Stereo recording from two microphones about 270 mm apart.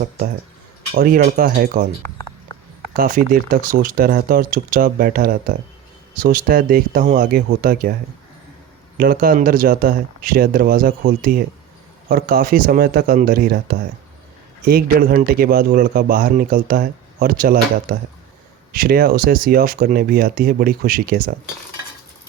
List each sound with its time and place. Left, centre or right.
0.9 s a man's voice: right
2.9 s a man's voice: right
9.0 s a man's voice: right